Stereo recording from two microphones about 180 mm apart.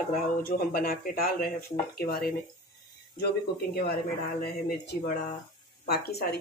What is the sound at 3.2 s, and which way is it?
Speech, 60° left (ahead or behind).